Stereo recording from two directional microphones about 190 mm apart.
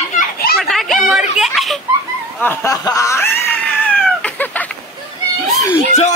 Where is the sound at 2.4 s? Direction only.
10° left (ahead or behind).